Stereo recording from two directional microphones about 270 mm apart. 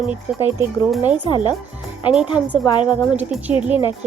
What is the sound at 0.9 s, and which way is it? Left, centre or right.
Speech, centre.